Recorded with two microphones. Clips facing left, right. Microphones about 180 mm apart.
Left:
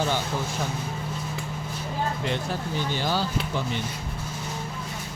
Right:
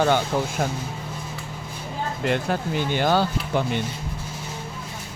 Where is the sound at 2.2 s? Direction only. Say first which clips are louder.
Right 5 dB; 60° right (ahead or behind).